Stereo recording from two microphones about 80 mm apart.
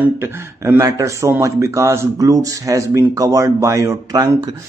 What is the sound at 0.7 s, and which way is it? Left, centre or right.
Speech, right.